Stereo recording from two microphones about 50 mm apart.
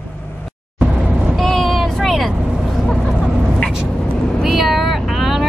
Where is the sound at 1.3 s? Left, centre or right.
Centre.